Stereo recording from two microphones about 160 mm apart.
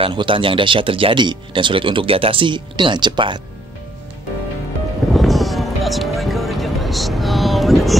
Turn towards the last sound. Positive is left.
turn(degrees=0)  # may be behind; listen again after turning